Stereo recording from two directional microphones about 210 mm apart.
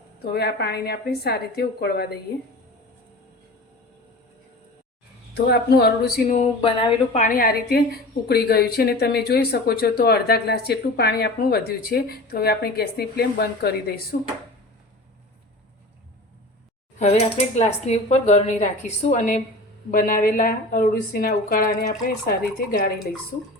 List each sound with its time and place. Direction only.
0.3 s a woman's voice: 50° left (ahead or behind)
5.3 s a woman's voice: 50° left (ahead or behind)
6.3 s speech: 30° left (ahead or behind)
7.2 s a woman's voice: 40° left (ahead or behind)
17.0 s a woman's voice: 30° left (ahead or behind)